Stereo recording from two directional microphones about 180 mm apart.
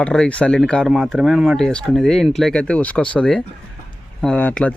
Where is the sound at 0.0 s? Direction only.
5° left (ahead or behind).